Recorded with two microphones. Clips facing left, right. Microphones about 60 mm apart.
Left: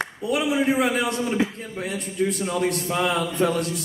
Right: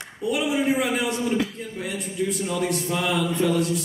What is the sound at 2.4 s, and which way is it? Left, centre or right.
A man's voice, left.